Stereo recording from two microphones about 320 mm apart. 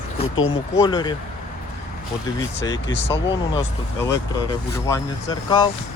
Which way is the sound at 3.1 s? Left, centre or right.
Centre.